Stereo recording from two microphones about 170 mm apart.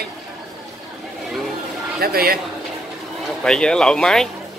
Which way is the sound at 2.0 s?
65° right (ahead or behind).